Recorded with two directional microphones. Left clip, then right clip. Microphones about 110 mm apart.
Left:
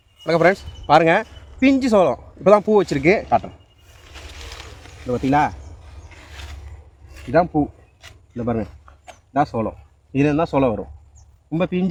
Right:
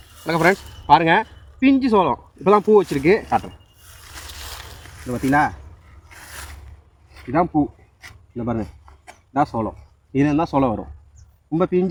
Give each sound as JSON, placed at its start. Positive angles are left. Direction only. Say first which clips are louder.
{"t": 0.3, "sound": "speech", "louder": "left 2 dB", "side_deg": 35}
{"t": 5.0, "sound": "speech", "louder": "even", "side_deg": -10}
{"t": 7.5, "sound": "speech", "louder": "right 1 dB", "side_deg": 0}